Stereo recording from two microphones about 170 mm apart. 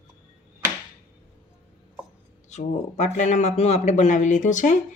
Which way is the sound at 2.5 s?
45° left (ahead or behind).